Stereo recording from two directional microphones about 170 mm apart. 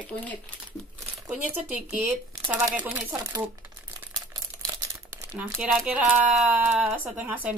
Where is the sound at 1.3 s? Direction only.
10° right (ahead or behind).